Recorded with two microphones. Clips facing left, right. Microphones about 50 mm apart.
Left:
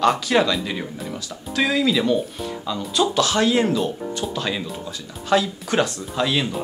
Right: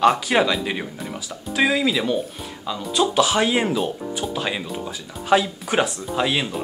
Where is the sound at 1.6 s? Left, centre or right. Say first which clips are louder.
Even; centre.